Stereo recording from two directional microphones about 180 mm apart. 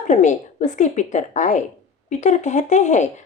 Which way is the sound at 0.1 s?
40° left (ahead or behind).